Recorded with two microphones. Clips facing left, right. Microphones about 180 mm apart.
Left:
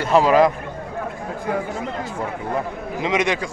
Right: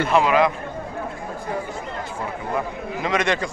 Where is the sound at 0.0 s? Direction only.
35° left (ahead or behind).